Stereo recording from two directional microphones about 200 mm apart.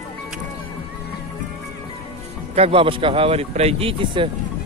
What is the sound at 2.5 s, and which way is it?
A man's voice, 30° right (ahead or behind).